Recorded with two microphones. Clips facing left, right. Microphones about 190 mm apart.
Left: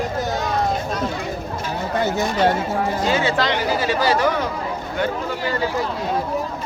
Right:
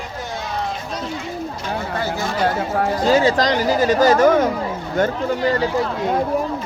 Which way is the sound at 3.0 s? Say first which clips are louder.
Right 6 dB; 40° right (ahead or behind).